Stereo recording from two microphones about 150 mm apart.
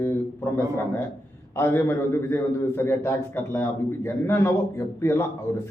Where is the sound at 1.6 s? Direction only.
15° left (ahead or behind).